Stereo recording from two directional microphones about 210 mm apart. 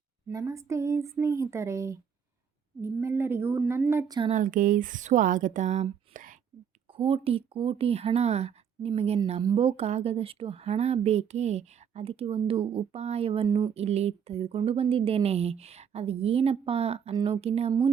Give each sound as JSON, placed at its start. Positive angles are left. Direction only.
{"t": 0.3, "sound": "speech", "side_deg": -15}
{"t": 4.2, "sound": "a woman's voice", "side_deg": -35}